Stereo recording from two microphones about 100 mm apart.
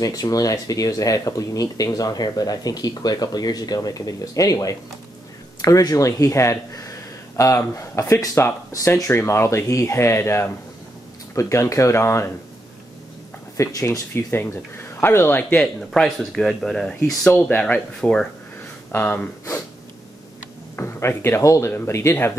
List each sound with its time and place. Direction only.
0.0 s speech: 35° left (ahead or behind)
13.6 s speech: 30° left (ahead or behind)
15.6 s speech: 5° left (ahead or behind)
20.7 s speech: 25° left (ahead or behind)